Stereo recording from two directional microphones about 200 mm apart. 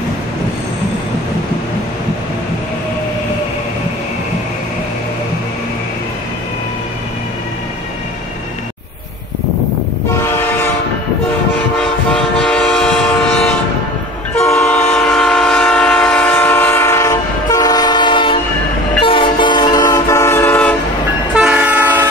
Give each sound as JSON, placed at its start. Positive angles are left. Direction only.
{"t": 12.4, "sound": "train", "side_deg": 5}
{"t": 14.5, "sound": "train", "side_deg": 5}
{"t": 21.4, "sound": "train", "side_deg": -5}